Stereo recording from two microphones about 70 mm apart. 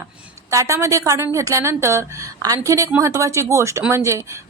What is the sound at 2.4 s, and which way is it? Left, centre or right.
A woman's voice, right.